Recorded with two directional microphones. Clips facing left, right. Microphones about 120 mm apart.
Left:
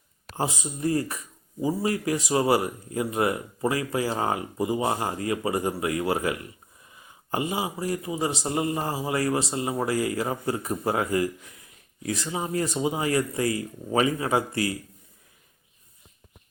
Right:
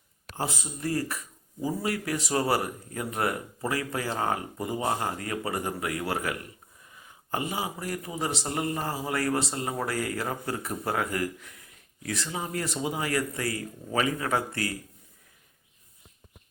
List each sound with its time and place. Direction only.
0.3 s speech: 20° left (ahead or behind)
2.1 s speech: 15° left (ahead or behind)
7.5 s speech: 15° left (ahead or behind)